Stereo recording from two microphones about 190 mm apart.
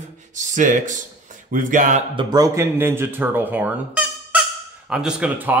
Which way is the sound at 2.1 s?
20° right (ahead or behind).